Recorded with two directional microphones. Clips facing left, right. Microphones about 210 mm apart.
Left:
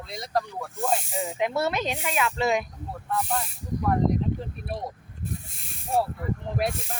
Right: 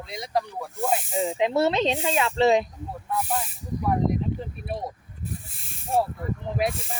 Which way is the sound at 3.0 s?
5° right (ahead or behind).